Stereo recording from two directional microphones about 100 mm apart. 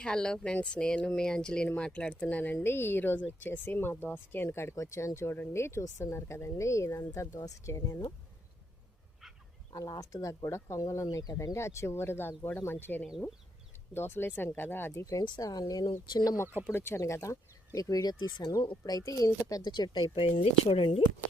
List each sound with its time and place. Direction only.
0.0 s speech: 10° left (ahead or behind); by 8.1 s 35° left (ahead or behind)
9.7 s speech: 35° left (ahead or behind)
11.5 s speech: 30° left (ahead or behind)
15.4 s speech: 40° left (ahead or behind)
16.6 s speech: 25° left (ahead or behind); by 18.7 s 50° left (ahead or behind)
18.9 s speech: 35° left (ahead or behind)
20.1 s speech: 65° left (ahead or behind)